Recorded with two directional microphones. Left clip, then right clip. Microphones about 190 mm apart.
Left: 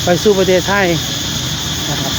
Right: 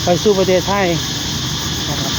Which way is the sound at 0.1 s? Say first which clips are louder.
Left 2 dB; 5° left (ahead or behind).